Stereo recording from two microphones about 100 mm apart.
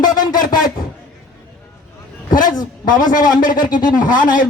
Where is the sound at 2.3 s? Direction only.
40° left (ahead or behind).